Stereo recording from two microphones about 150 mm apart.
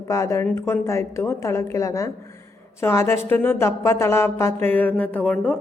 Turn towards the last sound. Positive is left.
turn(degrees=10)  # may be behind; listen again after turning